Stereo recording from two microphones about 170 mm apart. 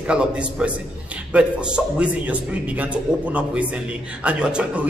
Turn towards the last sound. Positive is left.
turn(degrees=-5)  # may be behind; listen again after turning